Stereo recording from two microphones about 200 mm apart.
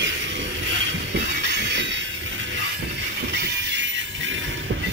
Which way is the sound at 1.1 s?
60° right (ahead or behind).